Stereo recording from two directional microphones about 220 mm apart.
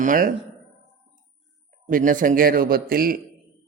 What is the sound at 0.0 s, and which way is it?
Speech, 40° right (ahead or behind).